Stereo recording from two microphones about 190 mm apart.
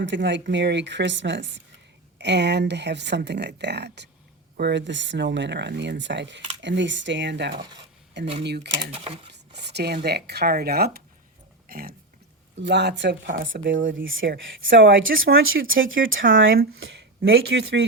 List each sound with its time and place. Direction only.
0.0 s speech: 70° right (ahead or behind)
7.5 s cutlery: 20° right (ahead or behind)
8.4 s speech: 60° right (ahead or behind)
8.8 s cutlery: 30° right (ahead or behind)
9.6 s speech: 60° right (ahead or behind)
11.7 s burping: 50° right (ahead or behind)
12.5 s speech: 65° right (ahead or behind)
14.0 s speech: 90° right
16.8 s speech: 65° right (ahead or behind)